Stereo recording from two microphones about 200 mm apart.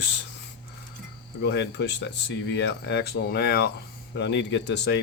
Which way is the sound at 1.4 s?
60° left (ahead or behind).